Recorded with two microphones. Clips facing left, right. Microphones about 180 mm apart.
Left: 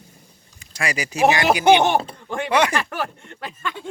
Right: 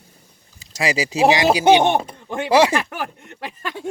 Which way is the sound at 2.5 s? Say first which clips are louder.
Right 5 dB; 30° right (ahead or behind).